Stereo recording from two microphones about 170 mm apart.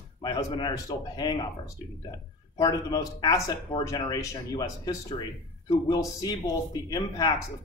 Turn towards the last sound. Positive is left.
turn(degrees=25)  # may be behind; listen again after turning